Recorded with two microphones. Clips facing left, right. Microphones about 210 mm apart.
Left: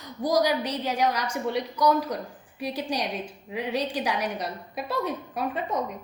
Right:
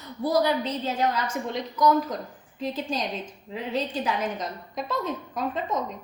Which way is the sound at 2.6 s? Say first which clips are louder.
Even; 10° left (ahead or behind).